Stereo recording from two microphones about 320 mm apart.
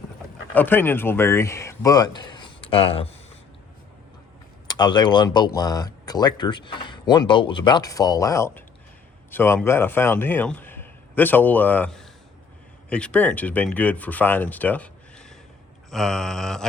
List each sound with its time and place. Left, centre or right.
0.5 s speech: centre
4.7 s speech: centre
15.9 s a sound: centre